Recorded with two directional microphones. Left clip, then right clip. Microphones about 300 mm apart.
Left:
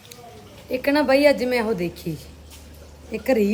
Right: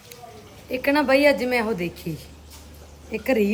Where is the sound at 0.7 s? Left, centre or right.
Centre.